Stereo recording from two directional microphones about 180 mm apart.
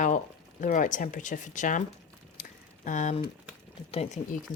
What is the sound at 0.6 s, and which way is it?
Speech, 45° left (ahead or behind).